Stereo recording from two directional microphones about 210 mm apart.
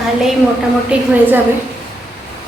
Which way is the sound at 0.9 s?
5° right (ahead or behind).